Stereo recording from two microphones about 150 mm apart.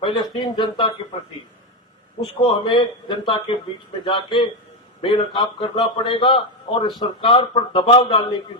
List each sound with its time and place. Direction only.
0.0 s a man's voice: 30° left (ahead or behind)
2.4 s a man's voice: 30° left (ahead or behind)